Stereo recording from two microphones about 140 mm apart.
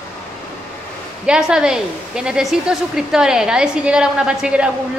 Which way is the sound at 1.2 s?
5° right (ahead or behind).